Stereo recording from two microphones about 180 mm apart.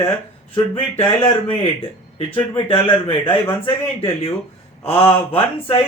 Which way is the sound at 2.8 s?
30° left (ahead or behind).